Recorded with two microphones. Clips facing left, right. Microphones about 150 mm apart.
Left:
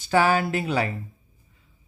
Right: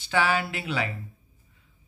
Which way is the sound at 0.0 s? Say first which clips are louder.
Left 5 dB; 45° left (ahead or behind).